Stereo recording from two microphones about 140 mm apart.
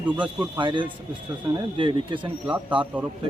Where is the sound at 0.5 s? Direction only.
35° right (ahead or behind).